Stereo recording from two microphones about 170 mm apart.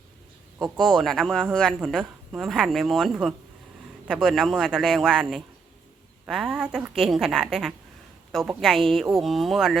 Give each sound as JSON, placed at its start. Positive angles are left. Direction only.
{"t": 0.6, "sound": "a woman's voice", "side_deg": 0}